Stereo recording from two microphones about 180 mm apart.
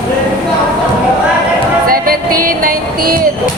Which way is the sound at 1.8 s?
55° right (ahead or behind).